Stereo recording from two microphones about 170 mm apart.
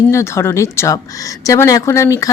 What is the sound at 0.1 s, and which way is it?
Speech, 15° left (ahead or behind).